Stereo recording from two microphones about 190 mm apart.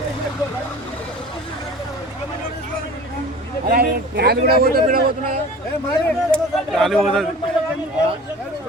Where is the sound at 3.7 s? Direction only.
50° right (ahead or behind).